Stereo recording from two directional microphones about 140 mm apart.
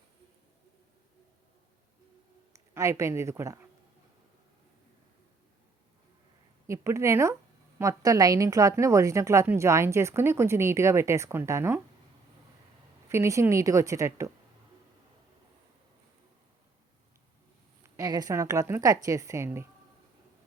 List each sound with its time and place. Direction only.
2.5 s speech: 20° right (ahead or behind)
6.7 s a woman's voice: 20° right (ahead or behind)
13.1 s a woman's voice: 20° right (ahead or behind)
17.8 s a woman's voice: 25° right (ahead or behind)